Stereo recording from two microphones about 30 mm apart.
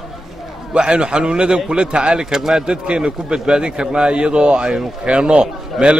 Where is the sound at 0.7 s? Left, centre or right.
Right.